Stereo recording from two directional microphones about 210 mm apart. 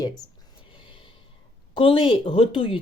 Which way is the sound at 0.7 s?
25° left (ahead or behind).